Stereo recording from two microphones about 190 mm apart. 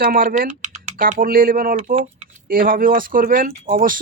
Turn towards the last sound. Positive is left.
turn(degrees=-45)  # may be behind; listen again after turning